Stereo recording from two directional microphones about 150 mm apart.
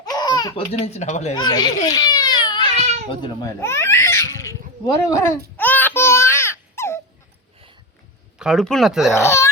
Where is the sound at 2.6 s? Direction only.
50° right (ahead or behind).